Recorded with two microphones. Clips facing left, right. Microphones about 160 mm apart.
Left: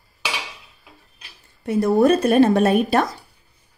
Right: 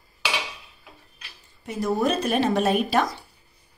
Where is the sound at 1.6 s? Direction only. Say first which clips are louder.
Left 8 dB; 55° left (ahead or behind).